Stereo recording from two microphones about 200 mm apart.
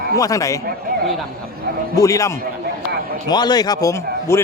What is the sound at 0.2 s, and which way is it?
Speech, 15° left (ahead or behind).